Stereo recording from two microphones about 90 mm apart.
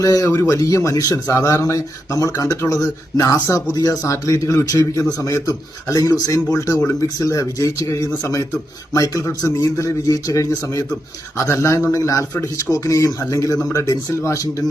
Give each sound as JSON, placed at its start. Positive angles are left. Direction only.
{"t": 0.0, "sound": "a man's voice", "side_deg": 40}